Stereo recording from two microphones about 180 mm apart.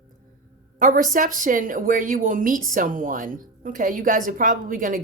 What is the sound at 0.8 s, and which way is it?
Speech, 50° right (ahead or behind).